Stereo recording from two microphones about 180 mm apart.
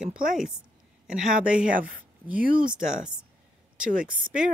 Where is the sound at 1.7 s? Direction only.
50° right (ahead or behind).